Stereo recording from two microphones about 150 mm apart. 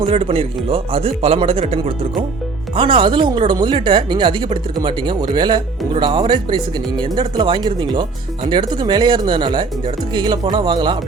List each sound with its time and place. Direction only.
0.0 s speech: 40° right (ahead or behind)